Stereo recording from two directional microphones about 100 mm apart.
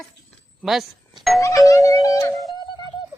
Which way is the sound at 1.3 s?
30° left (ahead or behind).